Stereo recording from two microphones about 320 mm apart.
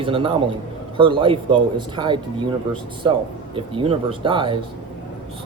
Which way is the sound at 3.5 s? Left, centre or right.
Centre.